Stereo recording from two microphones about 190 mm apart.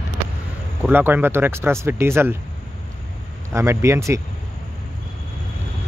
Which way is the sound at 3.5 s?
15° right (ahead or behind).